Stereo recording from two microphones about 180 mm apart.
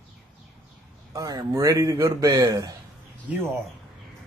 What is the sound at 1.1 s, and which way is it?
A man's voice, 20° right (ahead or behind).